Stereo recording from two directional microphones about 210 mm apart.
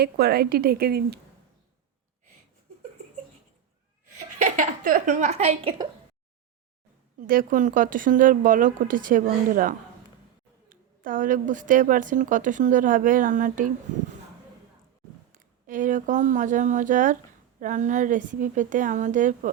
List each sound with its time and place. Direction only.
0.0 s speech: 50° right (ahead or behind)
4.2 s a woman's voice: 40° right (ahead or behind)
7.2 s speech: 40° right (ahead or behind)
15.3 s speech: 40° right (ahead or behind)